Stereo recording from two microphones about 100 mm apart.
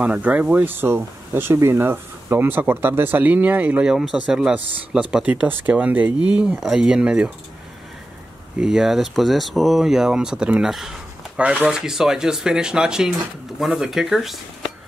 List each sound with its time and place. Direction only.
0.0 s speech: 15° right (ahead or behind)
8.5 s speech: 5° right (ahead or behind)